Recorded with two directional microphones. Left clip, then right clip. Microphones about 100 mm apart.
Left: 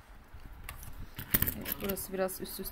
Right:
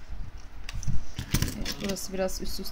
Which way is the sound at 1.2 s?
20° right (ahead or behind).